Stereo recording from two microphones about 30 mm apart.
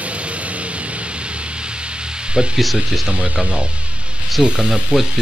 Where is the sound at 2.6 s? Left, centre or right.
Centre.